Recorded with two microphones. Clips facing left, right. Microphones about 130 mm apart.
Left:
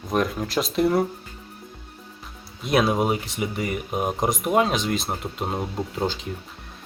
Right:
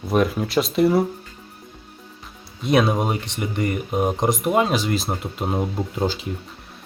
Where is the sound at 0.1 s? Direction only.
5° right (ahead or behind).